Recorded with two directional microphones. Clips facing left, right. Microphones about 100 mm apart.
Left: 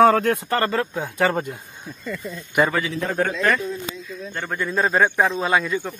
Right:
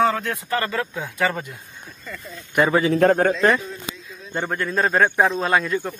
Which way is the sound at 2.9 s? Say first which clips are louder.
Right 10 dB; 60° right (ahead or behind).